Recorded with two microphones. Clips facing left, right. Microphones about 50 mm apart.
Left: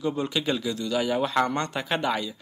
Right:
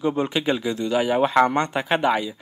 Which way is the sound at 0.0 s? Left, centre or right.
Right.